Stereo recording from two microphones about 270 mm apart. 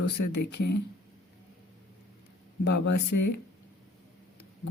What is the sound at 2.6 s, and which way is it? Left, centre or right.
Speech, left.